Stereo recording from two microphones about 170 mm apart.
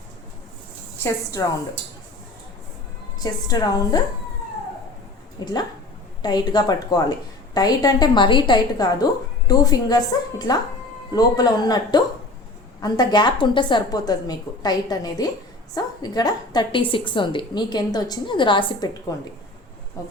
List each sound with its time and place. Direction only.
1.0 s a woman's voice: 15° left (ahead or behind)
3.4 s a woman's voice: 20° left (ahead or behind)
5.4 s a woman's voice: 25° left (ahead or behind)